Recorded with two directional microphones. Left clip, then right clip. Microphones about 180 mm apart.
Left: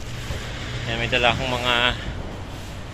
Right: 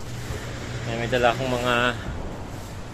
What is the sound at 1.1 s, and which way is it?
Speech, 40° right (ahead or behind).